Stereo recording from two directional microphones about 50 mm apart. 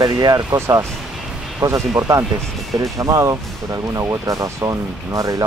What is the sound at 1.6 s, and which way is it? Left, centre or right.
Speech, right.